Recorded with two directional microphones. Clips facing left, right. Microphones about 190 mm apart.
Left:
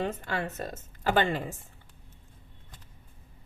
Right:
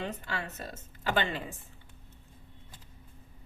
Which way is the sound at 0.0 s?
50° left (ahead or behind).